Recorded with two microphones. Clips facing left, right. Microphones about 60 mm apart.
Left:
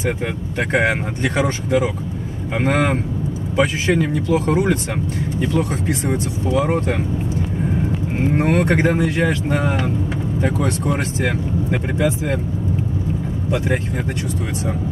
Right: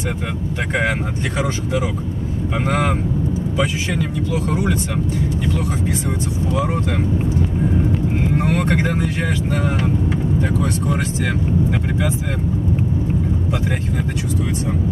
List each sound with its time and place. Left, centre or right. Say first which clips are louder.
3.5 s speech: left 7 dB; left
5.4 s speech: left 2 dB; left
8.4 s speech: left 4 dB; left
11.2 s speech: right 3 dB; left